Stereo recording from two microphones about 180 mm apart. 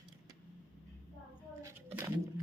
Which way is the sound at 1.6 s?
15° right (ahead or behind).